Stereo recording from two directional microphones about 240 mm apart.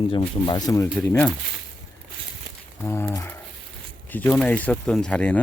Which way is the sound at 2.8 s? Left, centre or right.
Centre.